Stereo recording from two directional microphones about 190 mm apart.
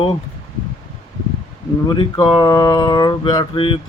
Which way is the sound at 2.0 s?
25° left (ahead or behind).